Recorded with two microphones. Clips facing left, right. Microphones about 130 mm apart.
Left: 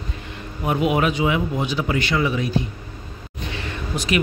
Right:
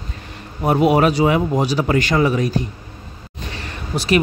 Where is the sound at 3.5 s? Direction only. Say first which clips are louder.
Right 2 dB; 35° right (ahead or behind).